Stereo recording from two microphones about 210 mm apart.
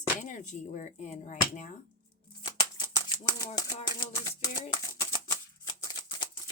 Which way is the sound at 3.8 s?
20° left (ahead or behind).